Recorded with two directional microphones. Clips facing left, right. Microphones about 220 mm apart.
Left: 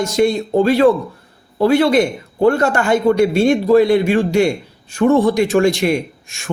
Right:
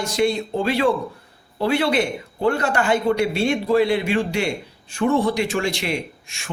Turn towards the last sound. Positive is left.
turn(degrees=45)  # may be behind; listen again after turning